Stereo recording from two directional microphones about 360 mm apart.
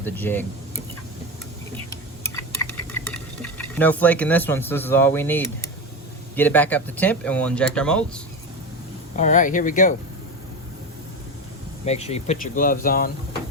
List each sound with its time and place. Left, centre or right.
0.0 s speech: centre
2.3 s a sound: centre
6.3 s speech: centre
9.1 s speech: centre
11.9 s speech: centre